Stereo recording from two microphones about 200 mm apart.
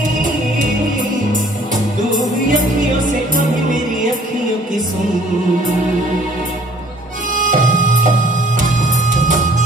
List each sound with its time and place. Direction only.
2.1 s music: 40° right (ahead or behind)
7.3 s music: 40° right (ahead or behind)